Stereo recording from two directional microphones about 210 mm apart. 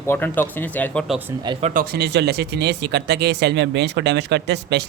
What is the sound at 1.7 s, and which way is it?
Speech, 45° right (ahead or behind).